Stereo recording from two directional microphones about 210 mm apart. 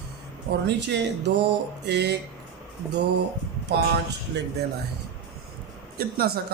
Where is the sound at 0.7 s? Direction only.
55° right (ahead or behind).